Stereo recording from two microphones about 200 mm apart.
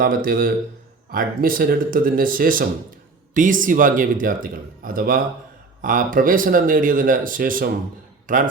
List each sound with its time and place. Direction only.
0.0 s speech: 45° right (ahead or behind)